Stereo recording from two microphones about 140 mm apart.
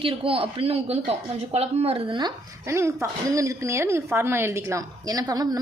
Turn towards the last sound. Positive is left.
turn(degrees=-25)  # may be behind; listen again after turning